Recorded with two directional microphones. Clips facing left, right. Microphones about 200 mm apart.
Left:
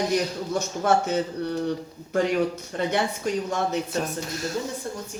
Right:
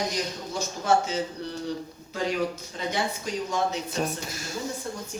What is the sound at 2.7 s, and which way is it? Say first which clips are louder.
Speech: left 5 dB; 55° left (ahead or behind).